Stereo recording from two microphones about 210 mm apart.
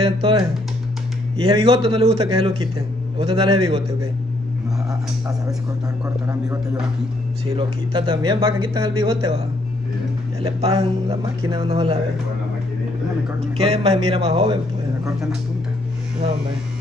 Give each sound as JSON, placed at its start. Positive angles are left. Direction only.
{"t": 0.0, "sound": "speech", "side_deg": -25}
{"t": 1.4, "sound": "speech", "side_deg": -25}
{"t": 7.5, "sound": "speech", "side_deg": -20}
{"t": 10.4, "sound": "speech", "side_deg": -25}
{"t": 13.4, "sound": "speech", "side_deg": -30}